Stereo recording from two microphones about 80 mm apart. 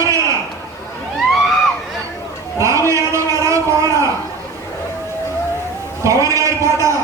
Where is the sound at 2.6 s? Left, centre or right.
Right.